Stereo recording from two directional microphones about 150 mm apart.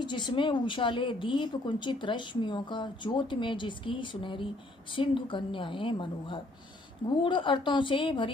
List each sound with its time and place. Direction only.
0.0 s speech: 30° left (ahead or behind)